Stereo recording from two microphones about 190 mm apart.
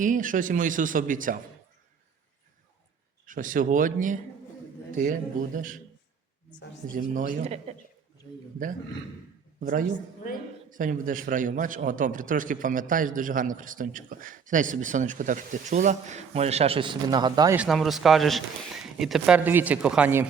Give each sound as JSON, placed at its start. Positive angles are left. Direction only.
{"t": 0.0, "sound": "a man's voice", "side_deg": -45}
{"t": 3.2, "sound": "a man's voice", "side_deg": -45}
{"t": 6.9, "sound": "a man's voice", "side_deg": -45}
{"t": 9.6, "sound": "a man's voice", "side_deg": -45}
{"t": 17.6, "sound": "speech", "side_deg": 0}